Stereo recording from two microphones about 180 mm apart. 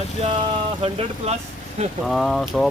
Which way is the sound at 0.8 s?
35° right (ahead or behind).